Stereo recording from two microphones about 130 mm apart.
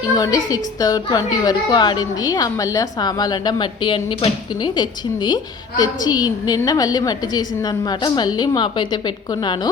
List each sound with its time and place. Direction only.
0.2 s a woman's voice: 30° left (ahead or behind)